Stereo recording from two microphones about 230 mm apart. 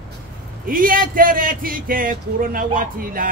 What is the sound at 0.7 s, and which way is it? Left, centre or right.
Speech, right.